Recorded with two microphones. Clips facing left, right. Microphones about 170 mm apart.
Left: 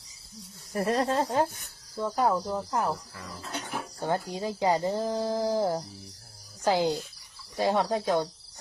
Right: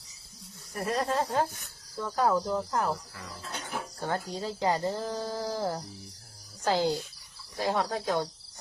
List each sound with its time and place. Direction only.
0.7 s speech: 30° left (ahead or behind); by 2.9 s 10° left (ahead or behind)
4.0 s speech: 15° left (ahead or behind)